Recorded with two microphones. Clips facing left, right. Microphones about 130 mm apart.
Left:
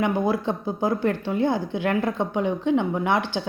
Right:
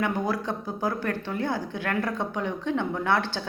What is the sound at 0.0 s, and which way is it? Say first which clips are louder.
Speech: left 4 dB; 20° left (ahead or behind).